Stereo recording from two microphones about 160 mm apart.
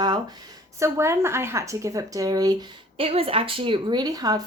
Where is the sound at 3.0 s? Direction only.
35° right (ahead or behind).